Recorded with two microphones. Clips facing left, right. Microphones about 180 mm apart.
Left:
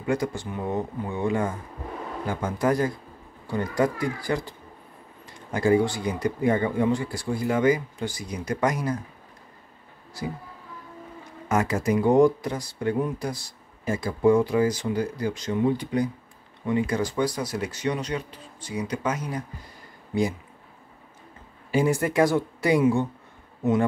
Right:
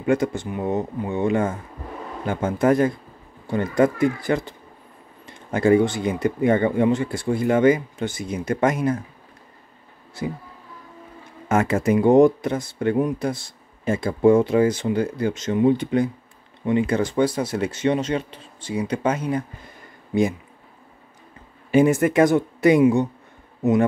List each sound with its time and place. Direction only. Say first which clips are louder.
0.0 s speech: right 5 dB; 20° right (ahead or behind)
11.4 s speech: right 4 dB; 25° right (ahead or behind)
21.7 s speech: right 5 dB; 20° right (ahead or behind)